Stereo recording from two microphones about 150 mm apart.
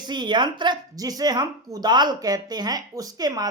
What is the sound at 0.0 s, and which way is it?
Speech, 30° right (ahead or behind).